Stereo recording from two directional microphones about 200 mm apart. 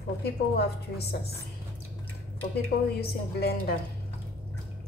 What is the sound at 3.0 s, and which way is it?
Speech, 55° left (ahead or behind).